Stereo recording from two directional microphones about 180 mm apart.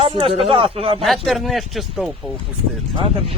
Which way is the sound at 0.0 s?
30° right (ahead or behind).